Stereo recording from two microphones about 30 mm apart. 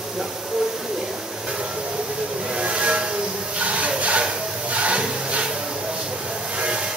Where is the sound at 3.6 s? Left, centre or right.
Right.